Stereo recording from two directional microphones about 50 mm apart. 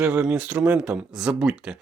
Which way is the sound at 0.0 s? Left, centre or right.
Right.